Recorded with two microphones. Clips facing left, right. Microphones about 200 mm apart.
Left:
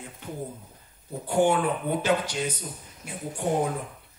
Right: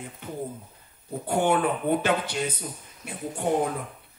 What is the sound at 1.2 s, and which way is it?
A man's voice, 55° right (ahead or behind).